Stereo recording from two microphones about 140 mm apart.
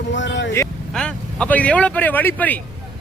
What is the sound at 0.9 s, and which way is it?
Speech, 5° left (ahead or behind).